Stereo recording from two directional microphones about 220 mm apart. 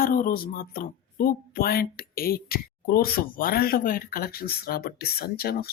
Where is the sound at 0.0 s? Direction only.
40° left (ahead or behind).